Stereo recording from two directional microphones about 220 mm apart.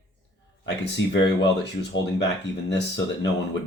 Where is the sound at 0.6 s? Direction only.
50° left (ahead or behind).